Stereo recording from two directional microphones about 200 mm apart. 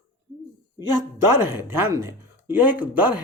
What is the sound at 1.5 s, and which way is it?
Speech, 10° right (ahead or behind).